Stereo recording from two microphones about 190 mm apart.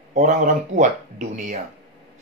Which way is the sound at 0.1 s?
45° right (ahead or behind).